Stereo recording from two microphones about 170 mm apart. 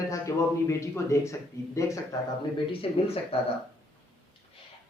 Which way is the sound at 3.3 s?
35° left (ahead or behind).